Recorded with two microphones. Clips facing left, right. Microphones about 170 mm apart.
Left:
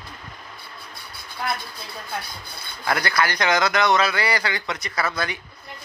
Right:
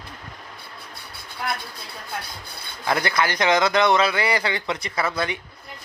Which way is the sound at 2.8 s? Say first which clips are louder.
Right 1 dB; 20° right (ahead or behind).